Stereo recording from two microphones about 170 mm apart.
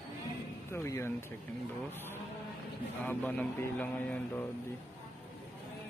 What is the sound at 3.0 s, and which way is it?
Speech, 10° left (ahead or behind).